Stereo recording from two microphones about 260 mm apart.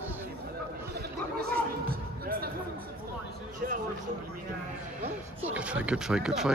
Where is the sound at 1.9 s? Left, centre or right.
Right.